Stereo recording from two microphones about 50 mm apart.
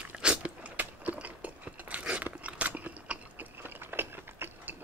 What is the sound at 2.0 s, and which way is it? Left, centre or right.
Biting, right.